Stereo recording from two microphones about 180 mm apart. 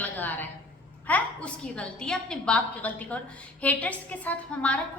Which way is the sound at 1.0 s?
10° left (ahead or behind).